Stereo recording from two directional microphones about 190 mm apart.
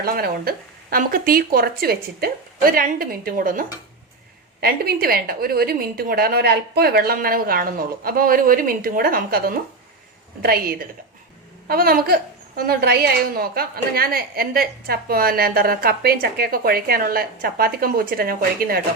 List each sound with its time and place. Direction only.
0.0 s a woman's voice: 50° right (ahead or behind)